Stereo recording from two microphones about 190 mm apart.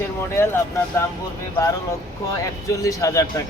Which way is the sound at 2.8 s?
15° left (ahead or behind).